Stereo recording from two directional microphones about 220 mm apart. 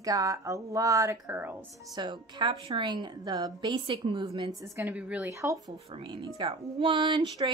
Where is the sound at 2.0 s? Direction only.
20° right (ahead or behind).